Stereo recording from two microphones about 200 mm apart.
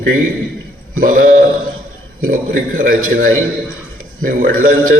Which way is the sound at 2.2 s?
40° right (ahead or behind).